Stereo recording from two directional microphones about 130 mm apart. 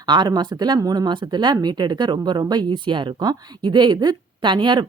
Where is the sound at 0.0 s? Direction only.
35° right (ahead or behind).